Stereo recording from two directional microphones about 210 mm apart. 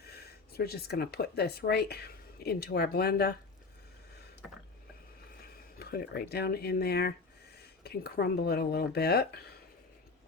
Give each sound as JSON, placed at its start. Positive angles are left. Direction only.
{"t": 0.0, "sound": "speech", "side_deg": 50}
{"t": 5.7, "sound": "speech", "side_deg": 45}